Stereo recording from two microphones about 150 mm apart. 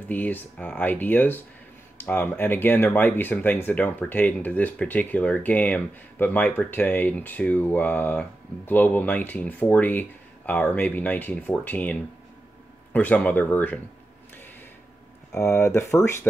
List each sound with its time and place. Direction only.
0.1 s speech: 10° left (ahead or behind)
15.3 s speech: 20° left (ahead or behind)